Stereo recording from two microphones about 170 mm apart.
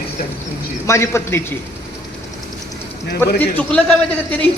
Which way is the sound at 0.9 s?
15° left (ahead or behind).